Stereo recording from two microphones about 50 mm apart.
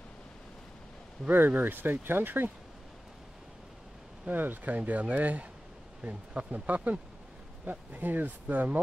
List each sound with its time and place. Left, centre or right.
1.3 s speech: right
4.3 s speech: right